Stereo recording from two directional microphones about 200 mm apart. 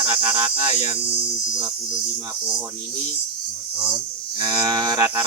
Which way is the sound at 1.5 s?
20° right (ahead or behind).